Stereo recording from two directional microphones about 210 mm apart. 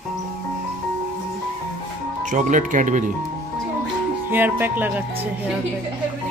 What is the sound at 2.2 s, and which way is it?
Speech, 35° right (ahead or behind).